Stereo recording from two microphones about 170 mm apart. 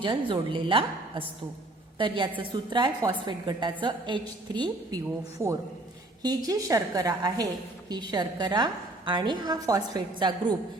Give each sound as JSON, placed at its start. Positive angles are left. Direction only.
{"t": 0.0, "sound": "a woman's voice", "side_deg": -30}